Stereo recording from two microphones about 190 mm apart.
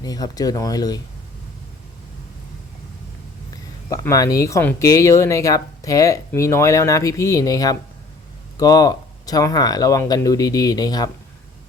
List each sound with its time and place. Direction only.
0.0 s speech: 20° left (ahead or behind)
3.8 s speech: 15° left (ahead or behind)